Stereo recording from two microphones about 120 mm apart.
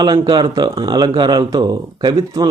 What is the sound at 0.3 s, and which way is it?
Speech, 35° right (ahead or behind).